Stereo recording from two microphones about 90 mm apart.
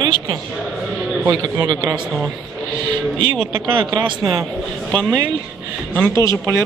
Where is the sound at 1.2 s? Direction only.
35° right (ahead or behind).